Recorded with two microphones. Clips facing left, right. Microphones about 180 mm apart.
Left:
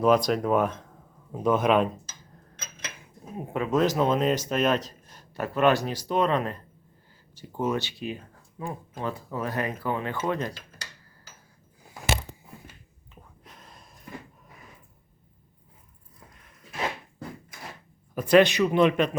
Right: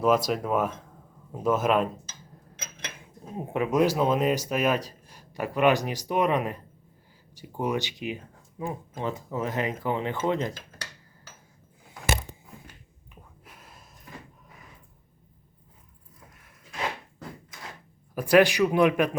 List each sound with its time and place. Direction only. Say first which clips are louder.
0.0 s speech: left 2 dB; 5° right (ahead or behind)
3.3 s speech: right 1 dB; 20° right (ahead or behind)
13.4 s gasp: left 2 dB; 10° right (ahead or behind)
18.1 s speech: left 1 dB; 10° right (ahead or behind)